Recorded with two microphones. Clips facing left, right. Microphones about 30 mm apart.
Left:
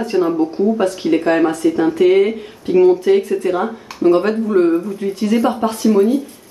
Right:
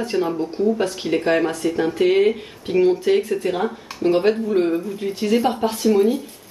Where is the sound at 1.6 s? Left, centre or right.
Centre.